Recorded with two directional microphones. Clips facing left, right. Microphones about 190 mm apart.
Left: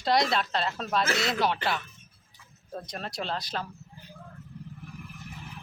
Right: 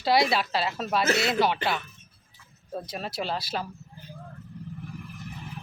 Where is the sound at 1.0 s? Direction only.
25° right (ahead or behind).